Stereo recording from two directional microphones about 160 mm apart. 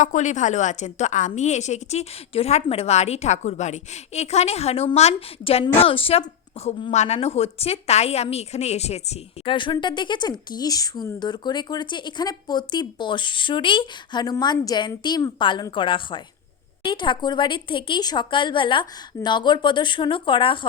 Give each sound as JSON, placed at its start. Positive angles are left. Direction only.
{"t": 0.0, "sound": "a woman's voice", "side_deg": 50}